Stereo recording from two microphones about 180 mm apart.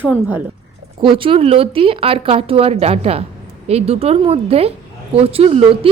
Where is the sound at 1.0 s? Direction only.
30° right (ahead or behind).